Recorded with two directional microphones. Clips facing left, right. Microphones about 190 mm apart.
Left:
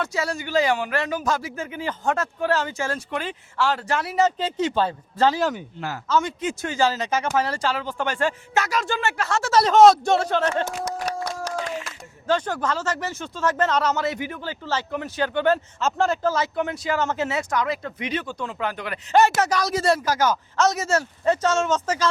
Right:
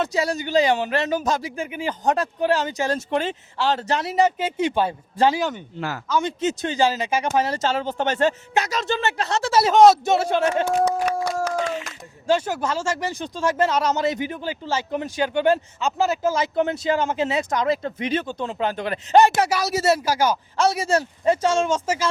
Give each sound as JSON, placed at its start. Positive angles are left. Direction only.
{"t": 0.0, "sound": "speech", "side_deg": -20}
{"t": 4.4, "sound": "speech", "side_deg": -10}
{"t": 5.4, "sound": "speech", "side_deg": 0}
{"t": 6.1, "sound": "speech", "side_deg": -20}
{"t": 9.5, "sound": "speech", "side_deg": -5}
{"t": 10.7, "sound": "a sound", "side_deg": -65}
{"t": 11.9, "sound": "speech", "side_deg": -10}
{"t": 15.8, "sound": "speech", "side_deg": 0}
{"t": 16.6, "sound": "speech", "side_deg": -25}
{"t": 17.0, "sound": "speech", "side_deg": -15}
{"t": 19.2, "sound": "speech", "side_deg": -15}